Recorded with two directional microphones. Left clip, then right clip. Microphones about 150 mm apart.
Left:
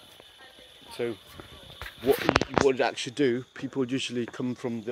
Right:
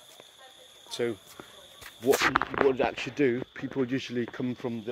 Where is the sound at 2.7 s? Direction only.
10° left (ahead or behind).